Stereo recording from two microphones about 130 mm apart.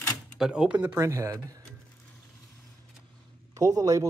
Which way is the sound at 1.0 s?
20° right (ahead or behind).